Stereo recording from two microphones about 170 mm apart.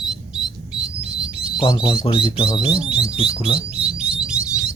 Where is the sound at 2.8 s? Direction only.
5° right (ahead or behind).